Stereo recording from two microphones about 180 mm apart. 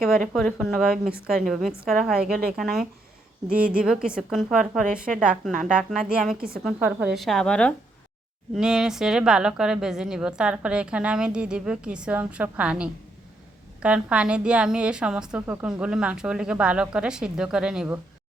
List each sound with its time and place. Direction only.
0.3 s a woman's voice: centre (ahead or behind)